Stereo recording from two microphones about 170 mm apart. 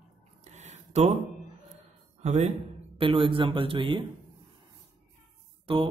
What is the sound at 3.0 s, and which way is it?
A man's voice, 30° right (ahead or behind).